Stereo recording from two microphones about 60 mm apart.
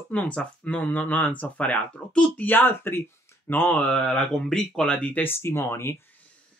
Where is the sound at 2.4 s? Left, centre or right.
Left.